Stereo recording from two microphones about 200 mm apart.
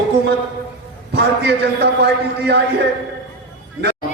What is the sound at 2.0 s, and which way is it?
Speech, 55° right (ahead or behind).